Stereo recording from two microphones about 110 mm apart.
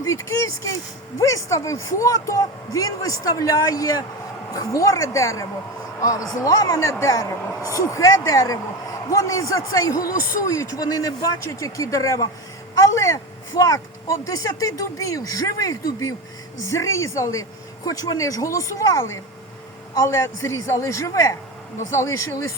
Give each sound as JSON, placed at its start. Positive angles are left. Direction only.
{"t": 0.0, "sound": "a man's voice", "side_deg": 25}